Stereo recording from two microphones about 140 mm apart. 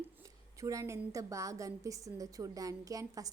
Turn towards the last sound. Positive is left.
turn(degrees=-25)  # may be behind; listen again after turning